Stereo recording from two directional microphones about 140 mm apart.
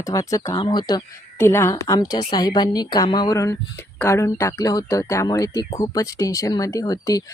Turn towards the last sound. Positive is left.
turn(degrees=25)  # may be behind; listen again after turning